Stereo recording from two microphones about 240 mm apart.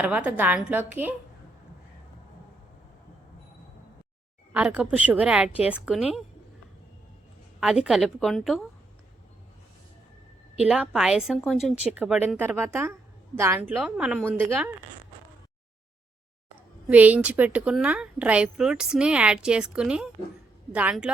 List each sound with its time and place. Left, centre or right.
0.0 s a woman's voice: centre
4.5 s a woman's voice: centre
7.6 s a woman's voice: centre
10.6 s a woman's voice: centre
16.9 s a woman's voice: centre